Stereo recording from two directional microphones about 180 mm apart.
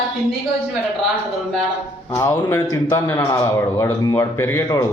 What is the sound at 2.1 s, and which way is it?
A man's voice, 15° left (ahead or behind).